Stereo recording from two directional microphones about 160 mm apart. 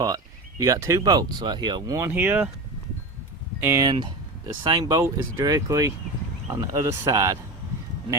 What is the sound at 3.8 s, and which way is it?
Speech, 25° right (ahead or behind).